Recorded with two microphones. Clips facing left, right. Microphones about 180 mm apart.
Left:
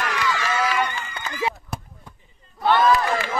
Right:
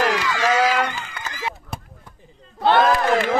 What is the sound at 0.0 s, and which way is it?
Run, 90° right.